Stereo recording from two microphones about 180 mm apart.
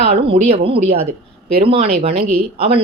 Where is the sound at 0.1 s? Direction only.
35° right (ahead or behind).